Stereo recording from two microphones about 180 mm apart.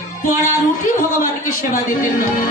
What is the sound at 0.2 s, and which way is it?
A man's voice, 45° left (ahead or behind).